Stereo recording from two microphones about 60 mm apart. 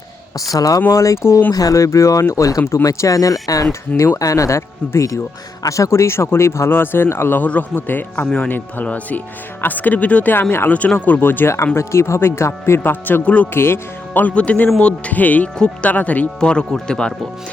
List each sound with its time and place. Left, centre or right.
0.5 s speech: left
0.9 s speech: left
1.5 s speech: left
3.7 s a man's voice: left
7.4 s speech: left
11.5 s a man's voice: left
13.5 s speech: left
15.5 s speech: centre
15.9 s speech: left
16.4 s speech: centre